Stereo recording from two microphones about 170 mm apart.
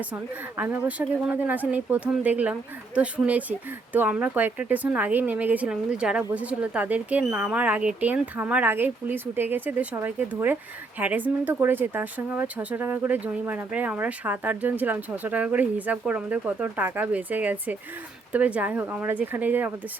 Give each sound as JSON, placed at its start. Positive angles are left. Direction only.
{"t": 0.1, "sound": "speech", "side_deg": -10}